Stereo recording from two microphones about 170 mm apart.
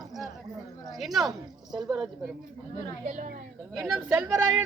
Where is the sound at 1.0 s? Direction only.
Centre (ahead or behind).